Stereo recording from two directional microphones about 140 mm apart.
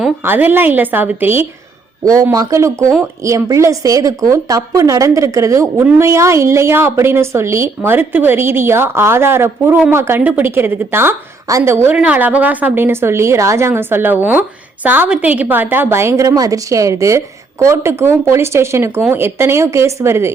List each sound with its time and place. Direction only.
0.2 s a woman's voice: 15° right (ahead or behind)